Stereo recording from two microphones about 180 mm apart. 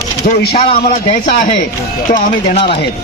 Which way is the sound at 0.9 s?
45° left (ahead or behind).